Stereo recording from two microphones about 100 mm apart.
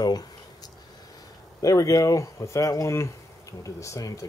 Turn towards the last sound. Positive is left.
turn(degrees=35)  # may be behind; listen again after turning